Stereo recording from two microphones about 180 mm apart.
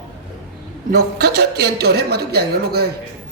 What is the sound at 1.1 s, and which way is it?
A man's voice, 65° right (ahead or behind).